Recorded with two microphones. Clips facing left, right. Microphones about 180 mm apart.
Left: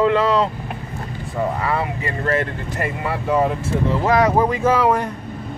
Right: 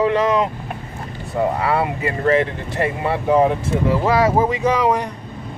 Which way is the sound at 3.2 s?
5° right (ahead or behind).